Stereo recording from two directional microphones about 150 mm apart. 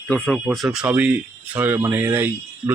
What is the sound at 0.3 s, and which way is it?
Speech, centre (ahead or behind).